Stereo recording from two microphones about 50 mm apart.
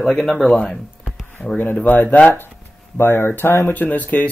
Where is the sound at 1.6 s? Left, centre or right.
Left.